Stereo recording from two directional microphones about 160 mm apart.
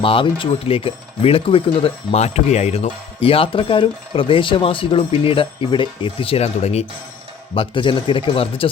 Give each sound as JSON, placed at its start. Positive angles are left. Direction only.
{"t": 0.0, "sound": "speech", "side_deg": 35}